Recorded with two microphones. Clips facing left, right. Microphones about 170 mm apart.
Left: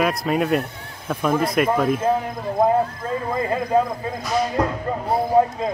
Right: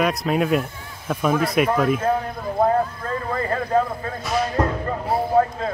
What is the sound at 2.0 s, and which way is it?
Speech, 10° left (ahead or behind).